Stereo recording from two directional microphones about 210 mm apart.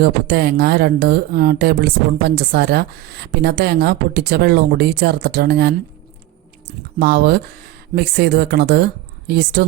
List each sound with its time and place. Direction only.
0.0 s speech: 50° right (ahead or behind)
7.0 s speech: 50° right (ahead or behind)